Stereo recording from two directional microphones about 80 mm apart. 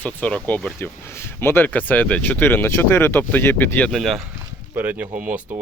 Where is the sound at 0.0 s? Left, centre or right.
Centre.